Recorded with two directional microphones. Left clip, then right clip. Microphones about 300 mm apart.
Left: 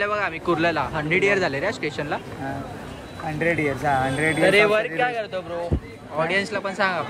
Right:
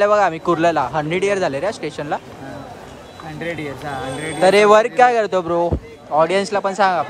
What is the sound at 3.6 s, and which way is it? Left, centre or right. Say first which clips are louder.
Speech: left 4 dB; centre.